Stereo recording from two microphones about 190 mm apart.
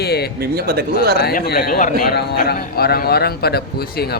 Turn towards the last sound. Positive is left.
turn(degrees=55)  # may be behind; listen again after turning